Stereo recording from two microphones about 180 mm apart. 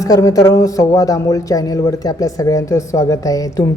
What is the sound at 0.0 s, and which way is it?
Speech, 20° left (ahead or behind).